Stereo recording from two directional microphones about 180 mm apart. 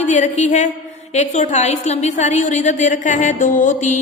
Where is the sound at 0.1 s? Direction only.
40° left (ahead or behind).